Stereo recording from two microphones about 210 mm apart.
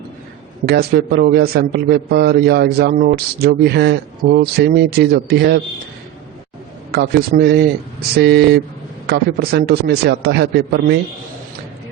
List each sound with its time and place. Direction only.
0.6 s a man's voice: 50° right (ahead or behind)
6.9 s a man's voice: 50° right (ahead or behind)